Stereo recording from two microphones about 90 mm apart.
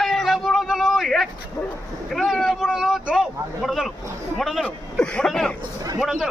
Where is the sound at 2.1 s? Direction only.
Centre (ahead or behind).